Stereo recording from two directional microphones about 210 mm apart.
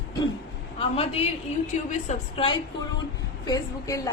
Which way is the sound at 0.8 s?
30° left (ahead or behind).